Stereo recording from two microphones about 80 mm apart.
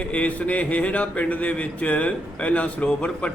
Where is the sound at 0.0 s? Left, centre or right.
Centre.